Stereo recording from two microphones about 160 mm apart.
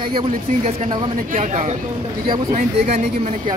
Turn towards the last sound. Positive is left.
turn(degrees=-45)  # may be behind; listen again after turning